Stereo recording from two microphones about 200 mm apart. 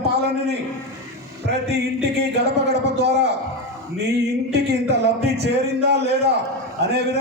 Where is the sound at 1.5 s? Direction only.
55° right (ahead or behind).